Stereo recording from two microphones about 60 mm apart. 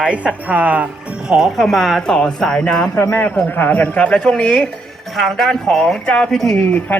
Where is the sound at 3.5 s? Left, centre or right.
Left.